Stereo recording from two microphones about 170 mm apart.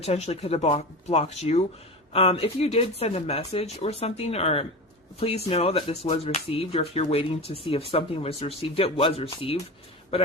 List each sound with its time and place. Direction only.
0.0 s speech: 40° left (ahead or behind)